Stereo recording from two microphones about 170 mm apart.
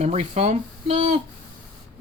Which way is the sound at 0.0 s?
40° right (ahead or behind).